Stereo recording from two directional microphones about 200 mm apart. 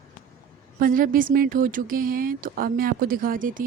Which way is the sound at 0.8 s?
45° right (ahead or behind).